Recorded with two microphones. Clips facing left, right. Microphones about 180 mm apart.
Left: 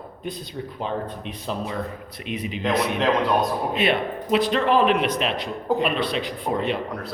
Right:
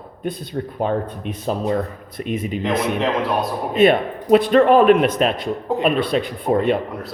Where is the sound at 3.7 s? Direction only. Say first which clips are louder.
Right 12 dB; 45° right (ahead or behind).